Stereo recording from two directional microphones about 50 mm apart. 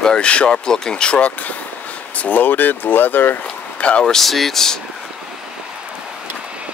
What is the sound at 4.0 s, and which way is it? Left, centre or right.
Speech, centre.